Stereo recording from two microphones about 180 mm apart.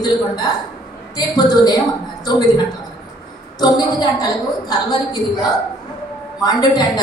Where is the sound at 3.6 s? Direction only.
25° left (ahead or behind).